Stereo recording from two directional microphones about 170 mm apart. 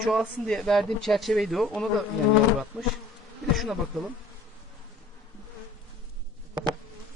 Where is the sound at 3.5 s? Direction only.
Centre (ahead or behind).